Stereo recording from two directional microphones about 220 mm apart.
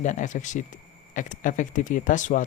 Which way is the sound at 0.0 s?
35° left (ahead or behind).